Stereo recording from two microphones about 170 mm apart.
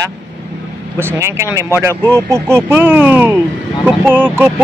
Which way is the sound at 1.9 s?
10° left (ahead or behind).